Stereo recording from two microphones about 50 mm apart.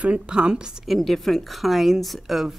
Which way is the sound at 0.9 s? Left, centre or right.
Centre.